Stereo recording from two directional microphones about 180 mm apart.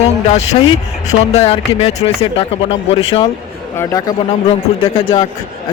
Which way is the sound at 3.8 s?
20° left (ahead or behind).